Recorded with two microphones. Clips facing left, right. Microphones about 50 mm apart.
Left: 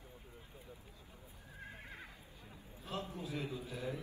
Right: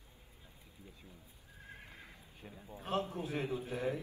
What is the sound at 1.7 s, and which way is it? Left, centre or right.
Neigh, left.